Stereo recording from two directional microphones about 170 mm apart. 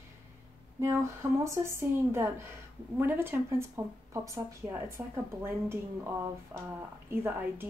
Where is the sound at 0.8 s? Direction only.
15° right (ahead or behind).